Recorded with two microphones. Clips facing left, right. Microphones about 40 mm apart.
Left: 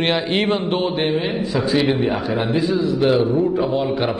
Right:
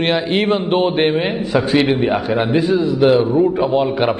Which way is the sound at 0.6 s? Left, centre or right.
Centre.